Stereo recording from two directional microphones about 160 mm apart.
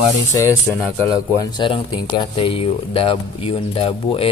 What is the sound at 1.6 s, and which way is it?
Speech, 30° left (ahead or behind).